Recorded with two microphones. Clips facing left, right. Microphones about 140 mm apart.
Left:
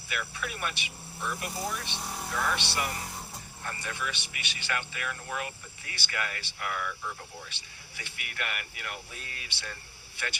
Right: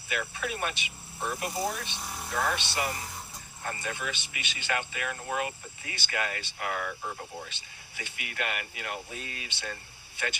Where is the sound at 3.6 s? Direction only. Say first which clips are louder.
Right 2 dB; 25° right (ahead or behind).